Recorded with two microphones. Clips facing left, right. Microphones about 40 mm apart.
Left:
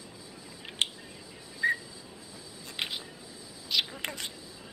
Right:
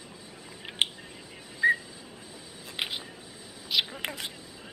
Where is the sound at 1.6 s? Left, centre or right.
Centre.